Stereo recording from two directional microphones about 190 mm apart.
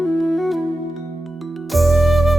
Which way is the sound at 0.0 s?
Centre (ahead or behind).